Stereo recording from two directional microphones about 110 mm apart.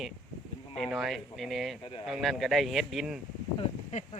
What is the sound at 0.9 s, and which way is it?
Speech, centre (ahead or behind).